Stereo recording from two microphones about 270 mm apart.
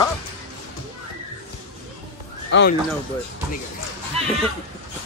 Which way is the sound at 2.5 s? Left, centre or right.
Left.